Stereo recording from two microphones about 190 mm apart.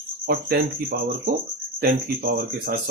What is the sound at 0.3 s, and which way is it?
Speech, 55° right (ahead or behind).